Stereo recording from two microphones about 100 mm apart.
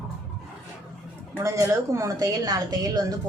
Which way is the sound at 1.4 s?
30° right (ahead or behind).